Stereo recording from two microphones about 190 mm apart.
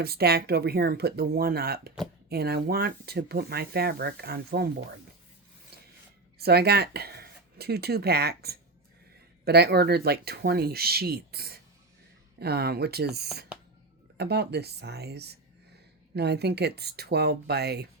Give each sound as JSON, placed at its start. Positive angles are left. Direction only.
{"t": 0.0, "sound": "speech", "side_deg": -55}
{"t": 6.4, "sound": "speech", "side_deg": -55}